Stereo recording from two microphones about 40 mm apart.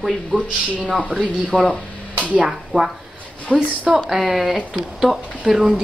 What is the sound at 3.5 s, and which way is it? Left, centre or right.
Speech, right.